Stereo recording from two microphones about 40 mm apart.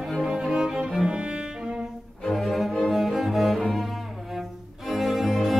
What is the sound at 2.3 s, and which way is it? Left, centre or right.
Cello, centre.